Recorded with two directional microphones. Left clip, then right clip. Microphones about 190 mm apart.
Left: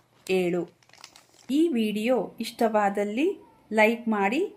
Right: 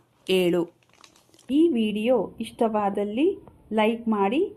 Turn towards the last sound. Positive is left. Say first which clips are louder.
# right 2 dB
turn(degrees=5)  # may be behind; listen again after turning